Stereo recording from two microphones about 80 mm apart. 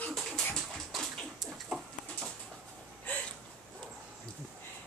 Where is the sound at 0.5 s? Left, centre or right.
Centre.